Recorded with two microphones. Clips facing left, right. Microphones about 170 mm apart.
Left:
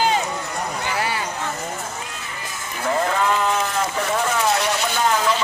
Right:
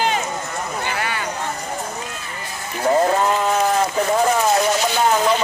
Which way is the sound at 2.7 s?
35° right (ahead or behind).